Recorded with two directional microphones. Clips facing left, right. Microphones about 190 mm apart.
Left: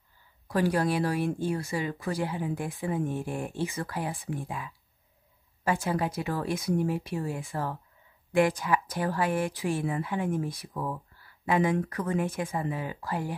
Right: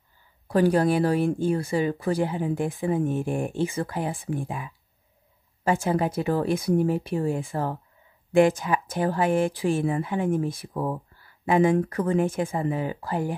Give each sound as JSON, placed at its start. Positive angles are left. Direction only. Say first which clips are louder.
{"t": 0.5, "sound": "speech", "louder": "right 6 dB", "side_deg": -30}